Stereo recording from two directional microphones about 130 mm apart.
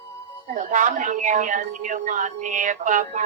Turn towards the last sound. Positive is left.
turn(degrees=-75)  # may be behind; listen again after turning